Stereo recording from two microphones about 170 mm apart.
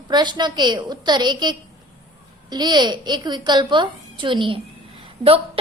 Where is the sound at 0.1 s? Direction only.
25° right (ahead or behind).